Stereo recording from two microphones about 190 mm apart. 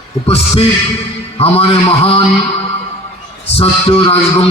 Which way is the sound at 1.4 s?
30° left (ahead or behind).